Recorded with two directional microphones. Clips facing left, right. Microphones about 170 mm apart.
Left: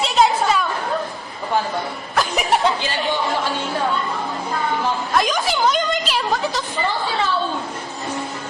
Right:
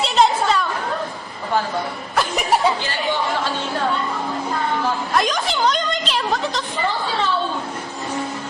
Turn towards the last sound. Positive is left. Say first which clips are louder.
# left 1 dB
turn(degrees=5)  # may be behind; listen again after turning